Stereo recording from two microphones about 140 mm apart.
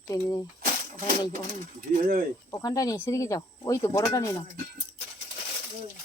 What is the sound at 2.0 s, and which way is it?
Speech, 80° right.